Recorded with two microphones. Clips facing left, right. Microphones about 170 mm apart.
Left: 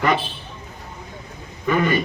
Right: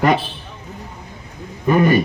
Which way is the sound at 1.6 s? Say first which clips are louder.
Right 5 dB; 40° right (ahead or behind).